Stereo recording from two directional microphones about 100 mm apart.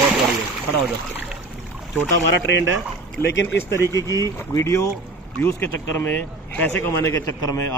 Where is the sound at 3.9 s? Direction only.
35° left (ahead or behind).